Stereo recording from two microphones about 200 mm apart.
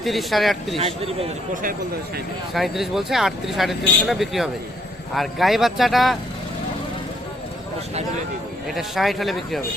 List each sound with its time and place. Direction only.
0.0 s speech: centre (ahead or behind)
0.8 s a man's voice: 30° right (ahead or behind)
2.5 s speech: centre (ahead or behind)
8.7 s speech: centre (ahead or behind)